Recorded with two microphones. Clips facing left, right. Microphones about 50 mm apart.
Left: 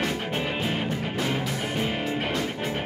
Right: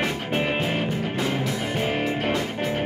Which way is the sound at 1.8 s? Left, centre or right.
Right.